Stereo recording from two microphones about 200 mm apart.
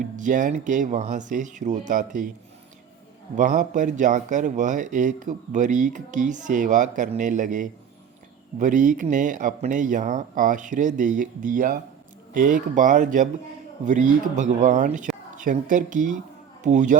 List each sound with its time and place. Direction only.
0.0 s speech: 40° right (ahead or behind)
3.3 s speech: 40° right (ahead or behind)